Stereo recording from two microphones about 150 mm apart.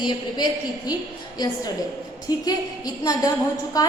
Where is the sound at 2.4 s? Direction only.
25° left (ahead or behind).